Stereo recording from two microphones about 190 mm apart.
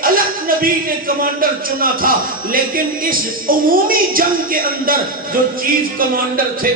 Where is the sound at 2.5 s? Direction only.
50° right (ahead or behind).